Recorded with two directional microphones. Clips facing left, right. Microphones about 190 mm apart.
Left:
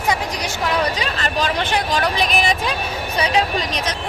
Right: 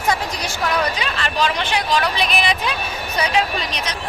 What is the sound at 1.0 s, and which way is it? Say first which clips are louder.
Speech: even; 40° left (ahead or behind).